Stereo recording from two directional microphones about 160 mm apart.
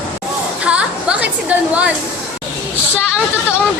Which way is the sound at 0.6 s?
5° right (ahead or behind).